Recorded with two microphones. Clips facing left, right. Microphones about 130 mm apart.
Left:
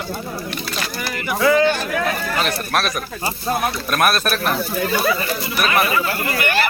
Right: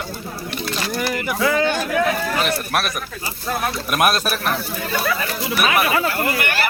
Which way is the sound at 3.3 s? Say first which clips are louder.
Left 4 dB; 25° left (ahead or behind).